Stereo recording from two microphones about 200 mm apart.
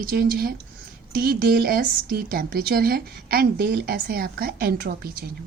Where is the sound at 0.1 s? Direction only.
50° right (ahead or behind).